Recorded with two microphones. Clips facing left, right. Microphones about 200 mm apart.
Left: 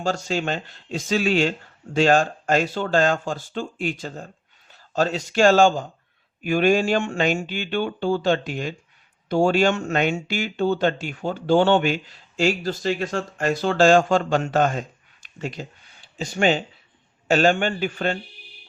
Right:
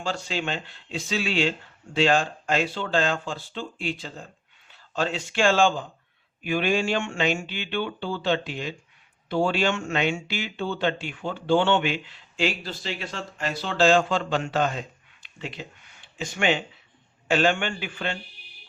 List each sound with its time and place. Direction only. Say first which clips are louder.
0.0 s speech: left 5 dB; 45° left (ahead or behind)